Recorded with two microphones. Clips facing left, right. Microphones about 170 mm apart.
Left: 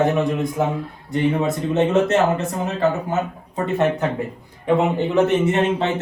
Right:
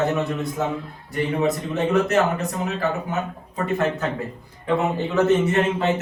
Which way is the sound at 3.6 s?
20° left (ahead or behind).